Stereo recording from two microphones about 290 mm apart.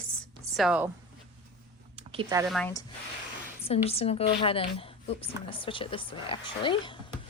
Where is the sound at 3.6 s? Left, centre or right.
Left.